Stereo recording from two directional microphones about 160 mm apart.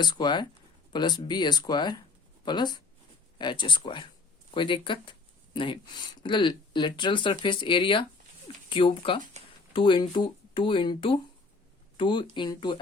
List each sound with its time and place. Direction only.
0.0 s speech: 25° left (ahead or behind)